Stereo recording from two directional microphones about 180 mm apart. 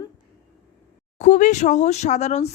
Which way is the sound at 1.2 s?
40° left (ahead or behind).